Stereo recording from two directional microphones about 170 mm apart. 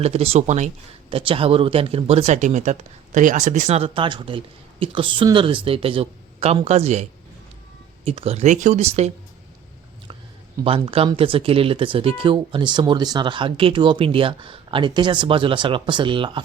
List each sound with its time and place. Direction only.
0.0 s speech: 35° right (ahead or behind)
1.1 s speech: 30° right (ahead or behind)
8.0 s speech: 35° right (ahead or behind)
10.6 s speech: 30° right (ahead or behind)